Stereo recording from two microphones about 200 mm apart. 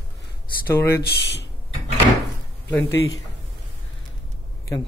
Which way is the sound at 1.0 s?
55° left (ahead or behind).